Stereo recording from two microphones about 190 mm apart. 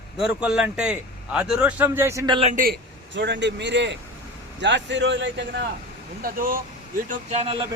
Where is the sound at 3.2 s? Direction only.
70° right (ahead or behind).